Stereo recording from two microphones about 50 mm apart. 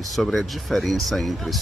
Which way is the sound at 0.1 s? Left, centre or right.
Centre.